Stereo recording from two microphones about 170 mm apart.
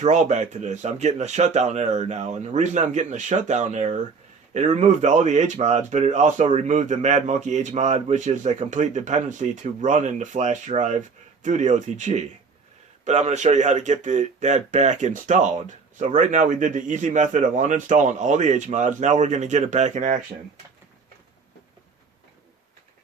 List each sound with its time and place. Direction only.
0.0 s speech: 45° right (ahead or behind)